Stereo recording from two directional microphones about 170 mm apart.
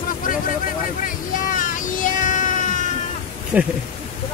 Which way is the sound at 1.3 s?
50° left (ahead or behind).